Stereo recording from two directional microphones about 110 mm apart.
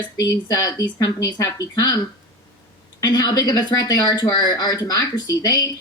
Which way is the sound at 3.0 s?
40° left (ahead or behind).